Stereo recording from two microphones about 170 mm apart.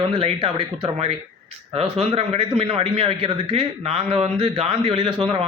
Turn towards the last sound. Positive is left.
turn(degrees=-35)  # may be behind; listen again after turning